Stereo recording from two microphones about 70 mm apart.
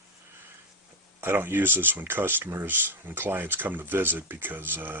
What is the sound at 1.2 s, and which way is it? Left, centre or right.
Speech, right.